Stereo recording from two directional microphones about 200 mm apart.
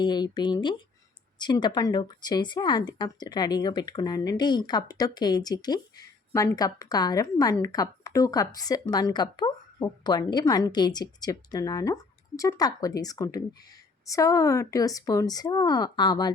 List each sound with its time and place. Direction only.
0.0 s speech: 20° left (ahead or behind)